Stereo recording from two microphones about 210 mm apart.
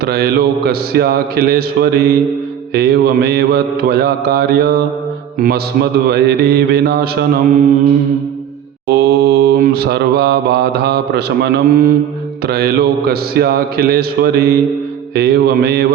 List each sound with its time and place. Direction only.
0.0 s mantra: 50° right (ahead or behind)
9.0 s mantra: 50° right (ahead or behind)
12.5 s mantra: 50° right (ahead or behind)